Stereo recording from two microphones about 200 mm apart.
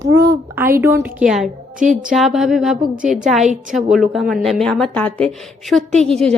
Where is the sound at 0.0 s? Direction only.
15° right (ahead or behind).